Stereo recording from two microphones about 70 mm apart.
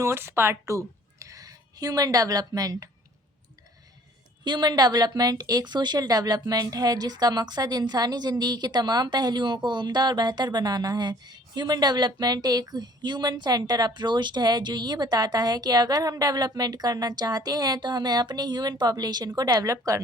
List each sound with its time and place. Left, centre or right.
0.0 s a woman's voice: right
4.4 s a woman's voice: right
19.5 s speech: right